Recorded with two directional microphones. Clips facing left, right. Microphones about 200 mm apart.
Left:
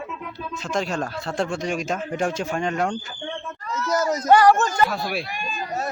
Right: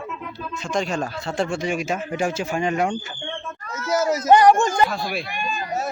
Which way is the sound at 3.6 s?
50° right (ahead or behind).